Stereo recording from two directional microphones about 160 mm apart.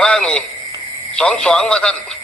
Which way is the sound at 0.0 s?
5° left (ahead or behind).